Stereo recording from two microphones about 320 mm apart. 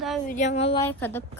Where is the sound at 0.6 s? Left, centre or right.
Centre.